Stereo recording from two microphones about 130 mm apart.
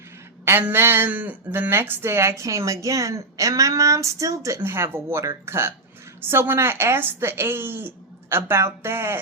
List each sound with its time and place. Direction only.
0.4 s speech: 15° right (ahead or behind)